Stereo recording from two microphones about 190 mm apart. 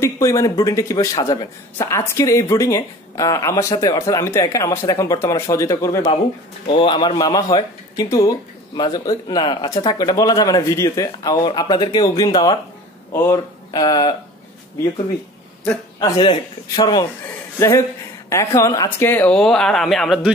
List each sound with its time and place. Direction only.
0.0 s speech: 15° left (ahead or behind)
15.6 s a man's voice: 10° left (ahead or behind)
16.2 s speech: 25° left (ahead or behind); by 20.3 s centre (ahead or behind)